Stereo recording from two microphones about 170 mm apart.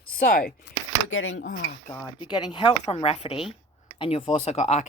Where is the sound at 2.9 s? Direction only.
35° left (ahead or behind).